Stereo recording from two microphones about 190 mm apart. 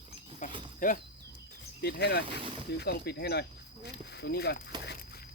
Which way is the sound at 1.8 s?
60° left (ahead or behind).